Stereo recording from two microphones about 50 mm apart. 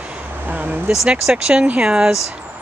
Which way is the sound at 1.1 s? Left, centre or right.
Centre.